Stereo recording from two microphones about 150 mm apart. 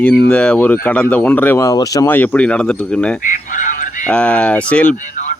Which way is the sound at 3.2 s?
60° left (ahead or behind).